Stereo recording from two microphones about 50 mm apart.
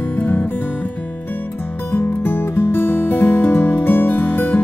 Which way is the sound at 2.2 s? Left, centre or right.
Left.